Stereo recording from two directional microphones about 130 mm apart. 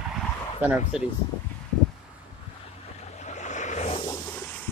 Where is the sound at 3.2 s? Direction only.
65° left (ahead or behind).